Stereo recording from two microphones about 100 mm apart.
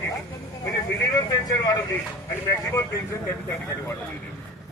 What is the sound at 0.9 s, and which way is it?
Vehicle, 40° left (ahead or behind).